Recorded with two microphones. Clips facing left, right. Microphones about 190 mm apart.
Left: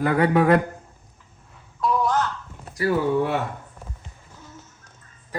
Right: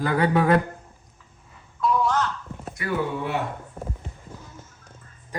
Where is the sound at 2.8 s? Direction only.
35° left (ahead or behind).